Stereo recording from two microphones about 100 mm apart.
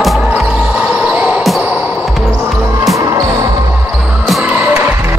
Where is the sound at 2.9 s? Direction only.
35° right (ahead or behind).